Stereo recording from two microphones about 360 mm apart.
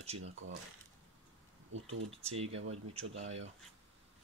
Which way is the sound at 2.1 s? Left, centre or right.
Centre.